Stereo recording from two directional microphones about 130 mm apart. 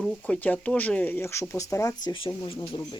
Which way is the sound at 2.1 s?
40° left (ahead or behind).